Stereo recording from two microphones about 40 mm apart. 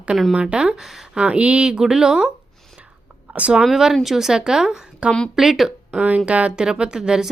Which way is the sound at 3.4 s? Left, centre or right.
Right.